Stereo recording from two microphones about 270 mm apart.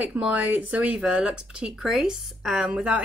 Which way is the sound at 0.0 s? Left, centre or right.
Centre.